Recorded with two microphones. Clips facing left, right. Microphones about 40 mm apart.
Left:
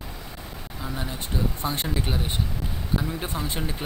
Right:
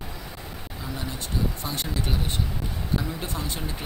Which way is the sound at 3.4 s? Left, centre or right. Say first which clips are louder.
Left 3 dB; left.